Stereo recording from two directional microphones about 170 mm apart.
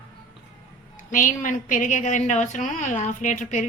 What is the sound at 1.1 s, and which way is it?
A woman's voice, 50° left (ahead or behind).